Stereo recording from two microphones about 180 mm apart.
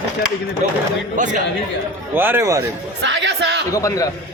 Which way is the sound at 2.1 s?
10° right (ahead or behind).